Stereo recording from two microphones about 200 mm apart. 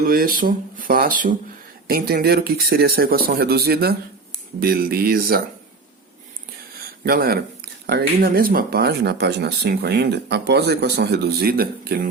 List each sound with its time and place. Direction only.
0.0 s speech: 50° right (ahead or behind)
7.0 s speech: 50° right (ahead or behind)